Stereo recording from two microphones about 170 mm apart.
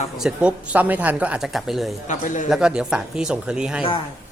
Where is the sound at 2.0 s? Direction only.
45° left (ahead or behind).